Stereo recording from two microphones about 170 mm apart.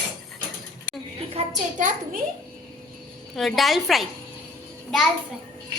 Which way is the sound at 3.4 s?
Centre (ahead or behind).